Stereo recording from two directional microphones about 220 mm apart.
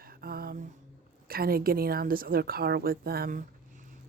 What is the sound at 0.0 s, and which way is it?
Mantra, 45° right (ahead or behind).